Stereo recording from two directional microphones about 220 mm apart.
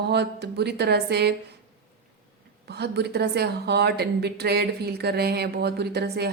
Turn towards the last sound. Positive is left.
turn(degrees=-45)  # may be behind; listen again after turning